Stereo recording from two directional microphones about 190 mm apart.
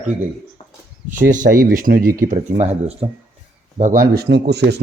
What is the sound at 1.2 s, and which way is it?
Speech, 45° right (ahead or behind).